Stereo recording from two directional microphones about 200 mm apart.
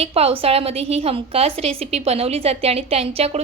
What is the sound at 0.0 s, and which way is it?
A woman's voice, 30° right (ahead or behind).